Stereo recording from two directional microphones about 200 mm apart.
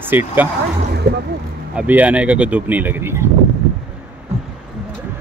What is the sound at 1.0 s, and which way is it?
Speech, 55° right (ahead or behind).